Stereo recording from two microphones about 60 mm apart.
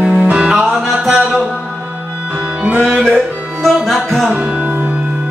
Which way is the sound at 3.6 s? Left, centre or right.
Centre.